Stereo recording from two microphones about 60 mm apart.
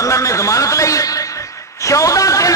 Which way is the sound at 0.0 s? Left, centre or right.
Left.